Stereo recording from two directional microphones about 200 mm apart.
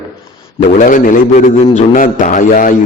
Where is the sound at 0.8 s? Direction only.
40° left (ahead or behind).